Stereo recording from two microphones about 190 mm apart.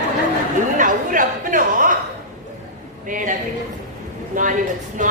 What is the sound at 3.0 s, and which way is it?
Speech, 45° right (ahead or behind).